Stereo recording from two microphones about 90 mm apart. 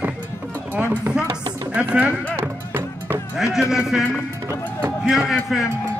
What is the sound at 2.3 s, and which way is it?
Music, 25° right (ahead or behind).